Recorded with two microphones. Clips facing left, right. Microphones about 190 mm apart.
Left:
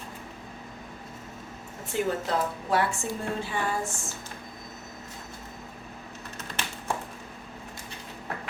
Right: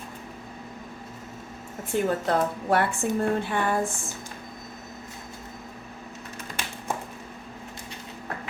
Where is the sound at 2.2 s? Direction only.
55° right (ahead or behind).